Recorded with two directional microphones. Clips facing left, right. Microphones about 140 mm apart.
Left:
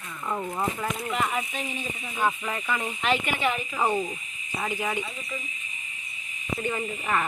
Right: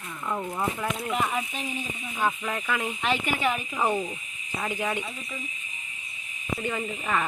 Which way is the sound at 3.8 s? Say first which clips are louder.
Left 1 dB; 10° left (ahead or behind).